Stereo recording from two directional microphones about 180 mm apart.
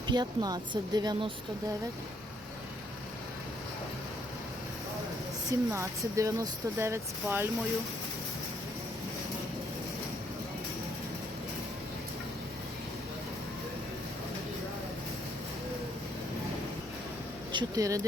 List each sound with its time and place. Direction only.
0.1 s speech: 20° right (ahead or behind)
5.5 s speech: 15° right (ahead or behind)
17.5 s speech: 20° right (ahead or behind)